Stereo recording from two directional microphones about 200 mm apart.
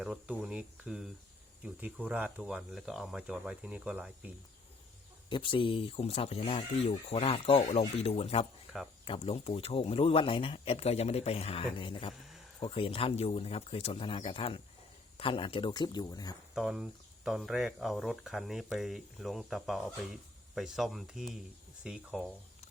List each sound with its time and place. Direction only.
0.0 s speech: 5° right (ahead or behind)
5.3 s speech: 25° left (ahead or behind)
16.6 s speech: centre (ahead or behind)